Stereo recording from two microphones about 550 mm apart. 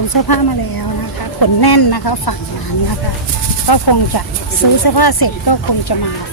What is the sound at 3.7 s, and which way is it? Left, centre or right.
A woman's voice, left.